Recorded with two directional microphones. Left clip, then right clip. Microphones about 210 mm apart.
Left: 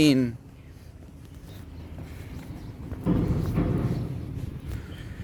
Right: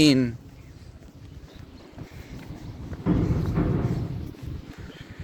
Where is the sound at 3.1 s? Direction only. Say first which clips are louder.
Right 1 dB; 30° right (ahead or behind).